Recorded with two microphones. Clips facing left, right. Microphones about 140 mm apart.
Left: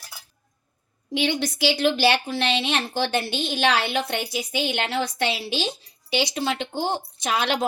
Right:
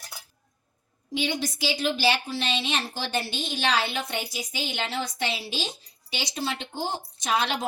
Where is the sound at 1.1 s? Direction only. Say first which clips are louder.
Left 4 dB; 70° left (ahead or behind).